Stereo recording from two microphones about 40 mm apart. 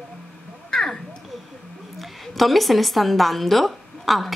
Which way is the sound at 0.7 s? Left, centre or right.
Centre.